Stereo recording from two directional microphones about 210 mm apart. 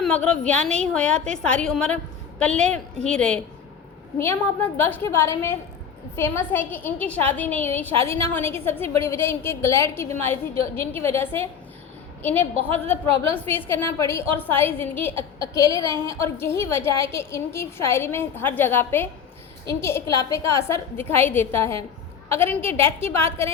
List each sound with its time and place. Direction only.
0.0 s a woman's voice: 5° left (ahead or behind)
15.8 s a woman's voice: 20° right (ahead or behind)
16.0 s a woman's voice: 10° left (ahead or behind)